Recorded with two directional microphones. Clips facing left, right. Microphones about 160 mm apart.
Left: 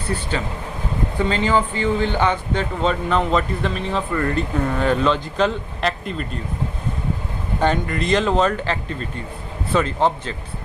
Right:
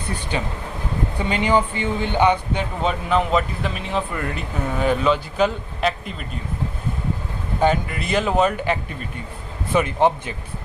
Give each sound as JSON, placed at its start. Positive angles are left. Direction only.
{"t": 0.1, "sound": "speech", "side_deg": -15}
{"t": 7.6, "sound": "speech", "side_deg": -5}